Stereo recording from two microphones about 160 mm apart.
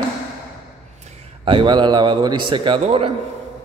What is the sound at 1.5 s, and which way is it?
A man's voice, 30° right (ahead or behind).